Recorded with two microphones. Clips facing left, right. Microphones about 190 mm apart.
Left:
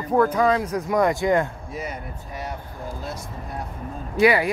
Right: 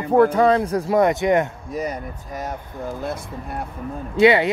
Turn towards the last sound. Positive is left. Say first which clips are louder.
# right 3 dB
turn(degrees=-25)  # may be behind; listen again after turning